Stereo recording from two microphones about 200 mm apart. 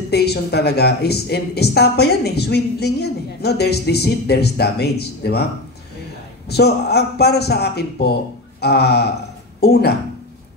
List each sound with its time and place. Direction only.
0.1 s speech: 55° left (ahead or behind)
6.5 s a man's voice: 55° left (ahead or behind)